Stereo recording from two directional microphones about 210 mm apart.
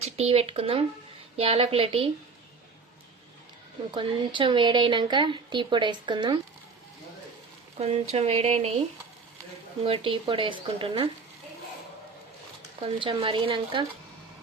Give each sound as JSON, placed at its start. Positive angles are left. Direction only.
{"t": 0.0, "sound": "speech", "side_deg": -30}
{"t": 3.9, "sound": "speech", "side_deg": -25}
{"t": 7.8, "sound": "speech", "side_deg": -30}
{"t": 9.8, "sound": "speech", "side_deg": -25}
{"t": 12.8, "sound": "speech", "side_deg": -25}